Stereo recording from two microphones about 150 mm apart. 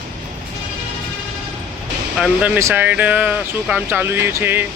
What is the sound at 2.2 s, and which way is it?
Speech, 10° right (ahead or behind).